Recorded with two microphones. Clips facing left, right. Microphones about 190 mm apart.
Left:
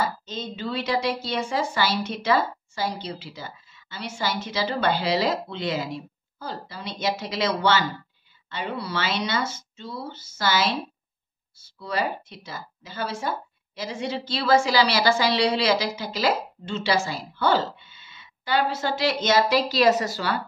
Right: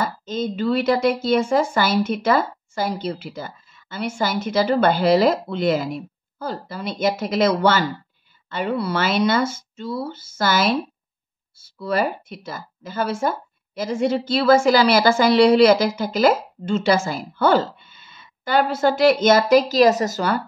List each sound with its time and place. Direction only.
0.0 s speech: 50° right (ahead or behind)
11.8 s speech: 55° right (ahead or behind)